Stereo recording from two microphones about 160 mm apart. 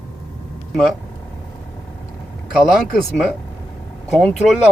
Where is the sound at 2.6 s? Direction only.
5° left (ahead or behind).